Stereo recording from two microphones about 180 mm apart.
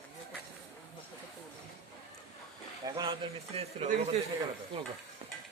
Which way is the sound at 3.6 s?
35° right (ahead or behind).